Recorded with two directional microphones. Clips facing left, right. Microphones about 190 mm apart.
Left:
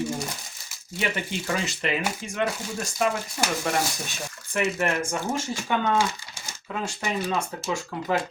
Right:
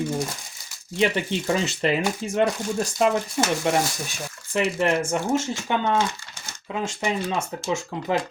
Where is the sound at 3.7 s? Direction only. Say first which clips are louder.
Right 4 dB; 20° right (ahead or behind).